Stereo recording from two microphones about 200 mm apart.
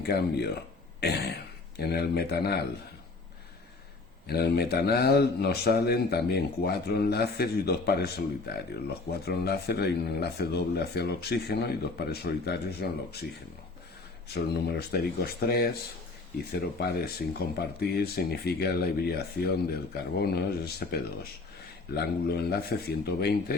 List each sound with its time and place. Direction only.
0.0 s speech: 55° left (ahead or behind)
4.3 s speech: 55° left (ahead or behind)
14.3 s speech: 55° left (ahead or behind)